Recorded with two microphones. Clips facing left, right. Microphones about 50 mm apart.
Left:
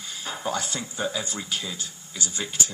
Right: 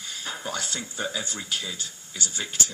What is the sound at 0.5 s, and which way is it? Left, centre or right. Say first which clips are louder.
Speech: left 2 dB; left.